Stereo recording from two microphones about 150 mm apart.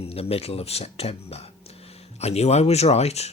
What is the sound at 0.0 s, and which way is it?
Speech, 40° left (ahead or behind).